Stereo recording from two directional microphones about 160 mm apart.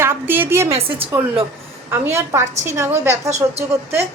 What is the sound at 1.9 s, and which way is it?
A woman's voice, 15° right (ahead or behind).